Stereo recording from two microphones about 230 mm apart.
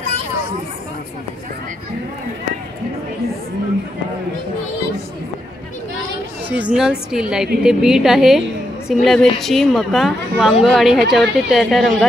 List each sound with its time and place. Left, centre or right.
6.5 s a woman's voice: centre